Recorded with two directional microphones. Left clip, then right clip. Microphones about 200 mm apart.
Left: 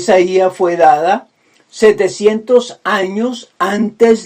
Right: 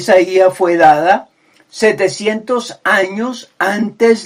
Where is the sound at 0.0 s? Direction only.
25° left (ahead or behind).